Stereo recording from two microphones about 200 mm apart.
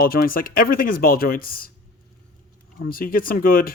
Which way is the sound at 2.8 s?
45° left (ahead or behind).